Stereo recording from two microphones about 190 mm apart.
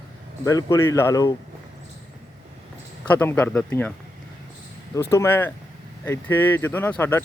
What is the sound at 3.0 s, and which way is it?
Speech, 10° left (ahead or behind).